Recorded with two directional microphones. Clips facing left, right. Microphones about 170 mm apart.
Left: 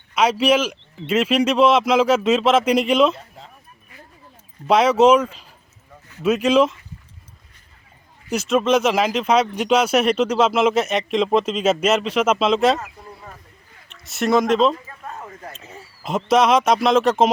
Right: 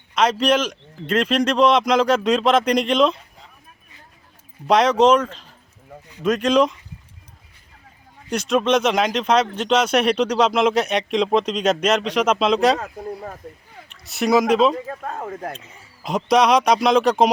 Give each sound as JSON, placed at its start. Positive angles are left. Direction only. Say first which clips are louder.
{"t": 0.1, "sound": "speech", "louder": "left 1 dB", "side_deg": 10}
{"t": 4.6, "sound": "speech", "louder": "left 1 dB", "side_deg": 5}
{"t": 8.3, "sound": "speech", "louder": "left 1 dB", "side_deg": 5}
{"t": 12.8, "sound": "speech", "louder": "right 8 dB", "side_deg": -60}
{"t": 13.9, "sound": "speech", "louder": "right 1 dB", "side_deg": 0}
{"t": 14.8, "sound": "speech", "louder": "right 7 dB", "side_deg": -55}
{"t": 16.0, "sound": "speech", "louder": "even", "side_deg": 0}